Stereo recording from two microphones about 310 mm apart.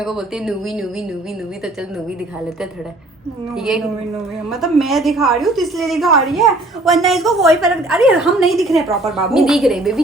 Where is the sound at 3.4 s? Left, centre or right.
Centre.